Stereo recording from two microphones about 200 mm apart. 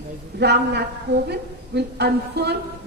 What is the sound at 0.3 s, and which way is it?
A woman's voice, 55° right (ahead or behind).